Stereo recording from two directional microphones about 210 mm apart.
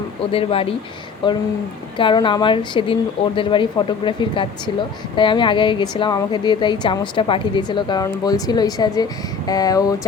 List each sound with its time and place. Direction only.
0.3 s a woman's voice: 25° left (ahead or behind)